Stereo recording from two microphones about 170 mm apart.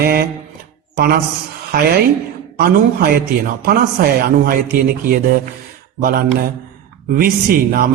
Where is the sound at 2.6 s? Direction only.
65° right (ahead or behind).